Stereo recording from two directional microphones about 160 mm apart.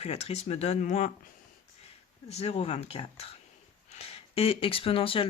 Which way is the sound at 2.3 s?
40° left (ahead or behind).